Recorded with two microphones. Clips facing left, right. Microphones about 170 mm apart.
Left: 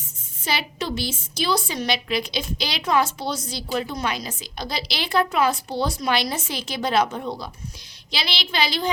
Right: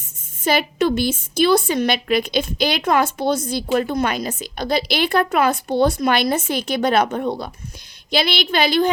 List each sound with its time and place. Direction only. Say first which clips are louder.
0.4 s a woman's voice: right 9 dB; 55° right (ahead or behind)